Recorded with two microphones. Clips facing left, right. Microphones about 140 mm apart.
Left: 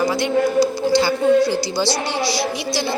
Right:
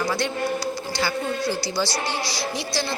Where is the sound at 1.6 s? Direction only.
15° left (ahead or behind).